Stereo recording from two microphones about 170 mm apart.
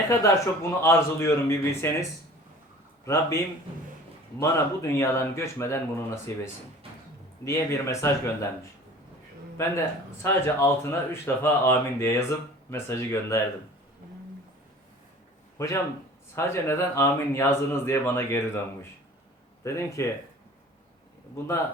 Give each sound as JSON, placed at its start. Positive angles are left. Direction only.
{"t": 0.1, "sound": "a man's voice", "side_deg": 15}
{"t": 4.4, "sound": "a man's voice", "side_deg": 15}
{"t": 9.6, "sound": "a man's voice", "side_deg": 20}
{"t": 15.5, "sound": "a man's voice", "side_deg": 20}